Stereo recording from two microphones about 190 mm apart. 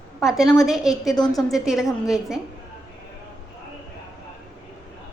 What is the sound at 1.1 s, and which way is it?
Speech, 20° left (ahead or behind).